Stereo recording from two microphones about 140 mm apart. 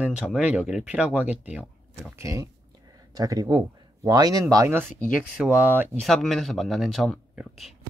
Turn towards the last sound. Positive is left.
turn(degrees=0)  # may be behind; listen again after turning